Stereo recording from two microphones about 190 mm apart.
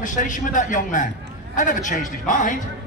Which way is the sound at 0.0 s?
40° left (ahead or behind).